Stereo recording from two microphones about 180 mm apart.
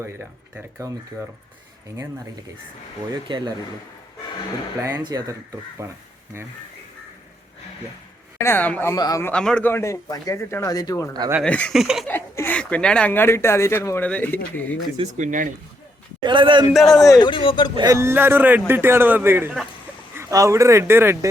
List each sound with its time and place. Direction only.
0.0 s speech: 10° right (ahead or behind)
3.2 s speech: 25° right (ahead or behind)
4.8 s speech: 20° right (ahead or behind)
8.4 s a man's voice: 10° left (ahead or behind)
9.3 s a man's voice: 5° left (ahead or behind)
11.1 s speech: 20° right (ahead or behind)
11.4 s speech: 5° left (ahead or behind)
12.0 s speech: 10° left (ahead or behind)
14.9 s speech: 40° right (ahead or behind)
16.2 s speech: 25° right (ahead or behind)
16.7 s speech: centre (ahead or behind)
17.1 s speech: 25° left (ahead or behind)
17.7 s speech: 20° right (ahead or behind)